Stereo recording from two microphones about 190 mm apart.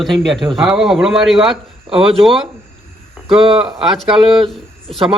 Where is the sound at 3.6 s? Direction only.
Centre (ahead or behind).